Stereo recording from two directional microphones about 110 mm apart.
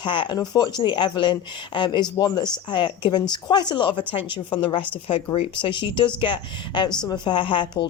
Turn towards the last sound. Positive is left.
turn(degrees=50)  # may be behind; listen again after turning